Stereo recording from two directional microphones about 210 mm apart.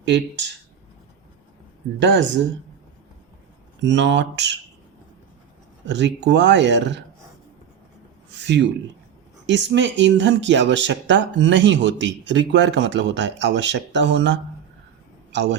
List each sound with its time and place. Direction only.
0.0 s speech: 55° right (ahead or behind)
2.0 s speech: 55° right (ahead or behind)
3.8 s speech: 55° right (ahead or behind)
5.8 s speech: 55° right (ahead or behind)
8.4 s a man's voice: 55° right (ahead or behind)